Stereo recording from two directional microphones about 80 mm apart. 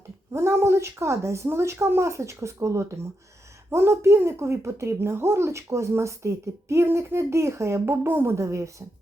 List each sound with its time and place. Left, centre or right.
0.3 s speech: right